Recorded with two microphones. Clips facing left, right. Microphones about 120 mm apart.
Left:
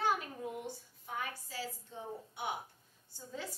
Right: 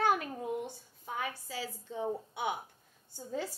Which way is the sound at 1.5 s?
90° right.